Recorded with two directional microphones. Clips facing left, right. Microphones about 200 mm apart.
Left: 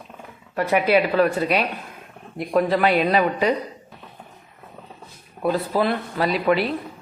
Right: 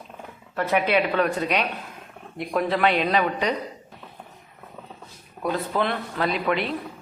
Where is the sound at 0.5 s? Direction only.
10° left (ahead or behind).